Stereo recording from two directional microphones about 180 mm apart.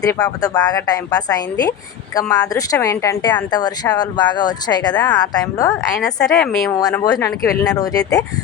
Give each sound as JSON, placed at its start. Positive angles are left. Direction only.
{"t": 0.0, "sound": "speech", "side_deg": 20}
{"t": 6.0, "sound": "a woman's voice", "side_deg": 5}
{"t": 6.7, "sound": "speech", "side_deg": 20}